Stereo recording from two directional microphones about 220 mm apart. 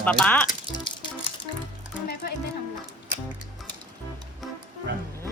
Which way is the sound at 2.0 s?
40° left (ahead or behind).